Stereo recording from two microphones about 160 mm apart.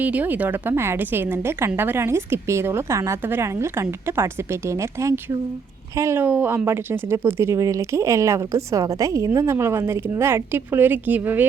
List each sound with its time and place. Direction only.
0.0 s speech: 10° right (ahead or behind)